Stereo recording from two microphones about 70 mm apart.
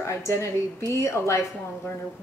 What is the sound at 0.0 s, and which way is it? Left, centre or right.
A woman's voice, left.